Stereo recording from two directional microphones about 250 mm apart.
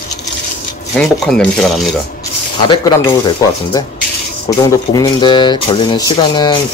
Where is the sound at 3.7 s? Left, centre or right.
Centre.